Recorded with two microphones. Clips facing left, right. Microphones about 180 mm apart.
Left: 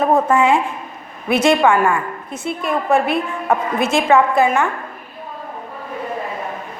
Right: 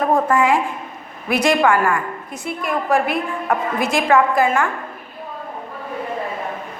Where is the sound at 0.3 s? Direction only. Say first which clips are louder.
Left 2 dB; 25° left (ahead or behind).